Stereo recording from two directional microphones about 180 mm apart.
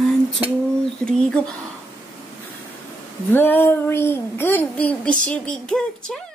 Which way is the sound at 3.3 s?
10° left (ahead or behind).